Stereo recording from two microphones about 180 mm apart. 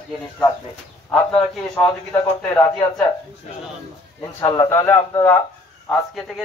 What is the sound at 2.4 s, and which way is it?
Speech, 5° left (ahead or behind).